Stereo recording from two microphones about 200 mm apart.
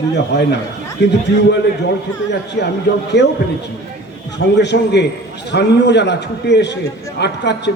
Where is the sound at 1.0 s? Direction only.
60° left (ahead or behind).